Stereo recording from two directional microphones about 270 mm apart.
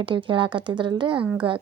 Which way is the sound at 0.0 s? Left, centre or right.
Centre.